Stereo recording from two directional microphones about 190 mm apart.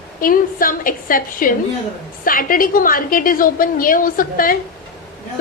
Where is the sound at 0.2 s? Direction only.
45° left (ahead or behind).